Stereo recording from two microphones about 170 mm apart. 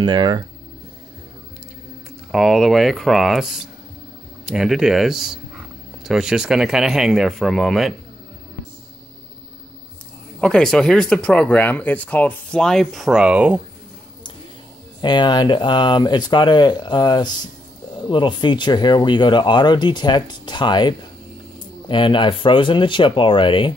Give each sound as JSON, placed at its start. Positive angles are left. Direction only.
{"t": 0.0, "sound": "speech", "side_deg": -25}
{"t": 2.3, "sound": "speech", "side_deg": 0}
{"t": 10.4, "sound": "speech", "side_deg": 5}
{"t": 15.0, "sound": "speech", "side_deg": 25}